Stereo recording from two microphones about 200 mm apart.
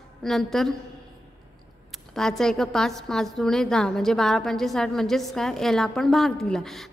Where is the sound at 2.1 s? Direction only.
Centre (ahead or behind).